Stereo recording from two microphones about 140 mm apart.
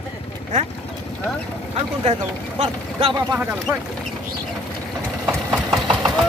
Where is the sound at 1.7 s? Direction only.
45° right (ahead or behind).